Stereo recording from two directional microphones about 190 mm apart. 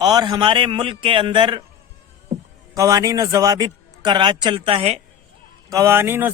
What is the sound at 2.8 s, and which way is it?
A man's voice, 20° right (ahead or behind).